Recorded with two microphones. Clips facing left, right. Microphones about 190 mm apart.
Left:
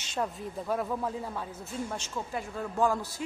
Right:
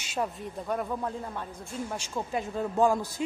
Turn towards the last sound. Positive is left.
turn(degrees=-15)  # may be behind; listen again after turning